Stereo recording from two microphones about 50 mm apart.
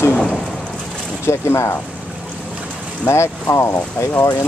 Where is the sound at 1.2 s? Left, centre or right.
Left.